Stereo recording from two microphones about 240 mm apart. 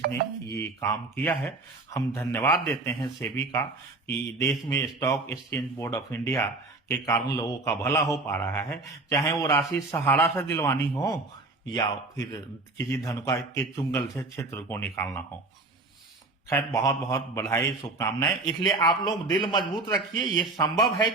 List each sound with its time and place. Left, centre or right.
0.1 s a man's voice: centre
16.5 s a man's voice: centre